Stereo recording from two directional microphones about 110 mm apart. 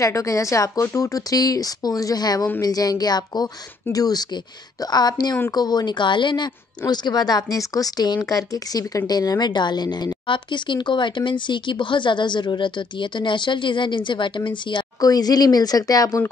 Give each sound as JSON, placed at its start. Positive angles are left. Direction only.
{"t": 0.0, "sound": "a woman's voice", "side_deg": 30}